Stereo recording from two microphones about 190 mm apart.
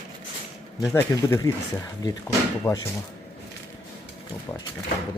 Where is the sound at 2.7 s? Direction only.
15° left (ahead or behind).